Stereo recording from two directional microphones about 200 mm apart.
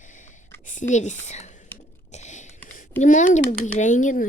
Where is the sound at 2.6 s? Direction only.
40° left (ahead or behind).